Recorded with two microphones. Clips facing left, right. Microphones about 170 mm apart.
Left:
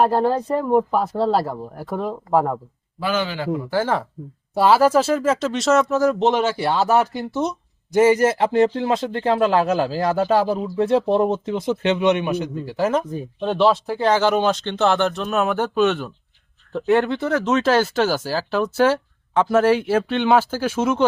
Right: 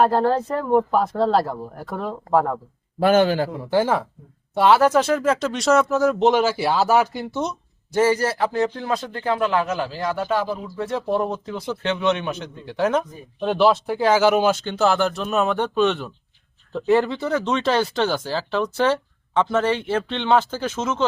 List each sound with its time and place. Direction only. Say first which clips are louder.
0.0 s speech: even; 10° left (ahead or behind)
3.0 s a man's voice: right 7 dB; 50° right (ahead or behind)
3.7 s speech: right 3 dB; 15° right (ahead or behind)
4.5 s speech: left 1 dB; 5° left (ahead or behind)
7.9 s a man's voice: left 4 dB; 20° left (ahead or behind); by 10.7 s 40° left (ahead or behind)
10.8 s speech: left 5 dB; 25° left (ahead or behind)